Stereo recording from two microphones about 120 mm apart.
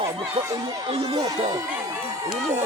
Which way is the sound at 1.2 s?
30° right (ahead or behind).